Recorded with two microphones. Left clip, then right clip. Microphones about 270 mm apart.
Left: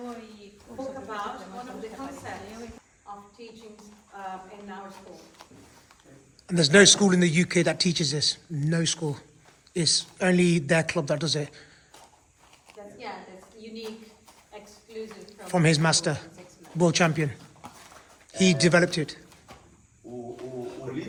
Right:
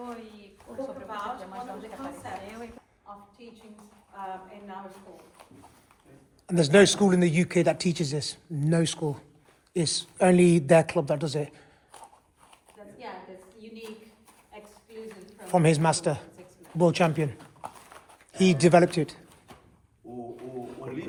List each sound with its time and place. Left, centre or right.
0.7 s a sound: right
6.5 s speech: centre
15.3 s a man's voice: centre
18.3 s speech: centre